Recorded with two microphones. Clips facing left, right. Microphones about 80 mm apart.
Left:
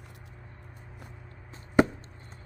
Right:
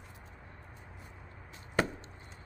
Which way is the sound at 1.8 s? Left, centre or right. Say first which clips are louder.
Left 9 dB; centre.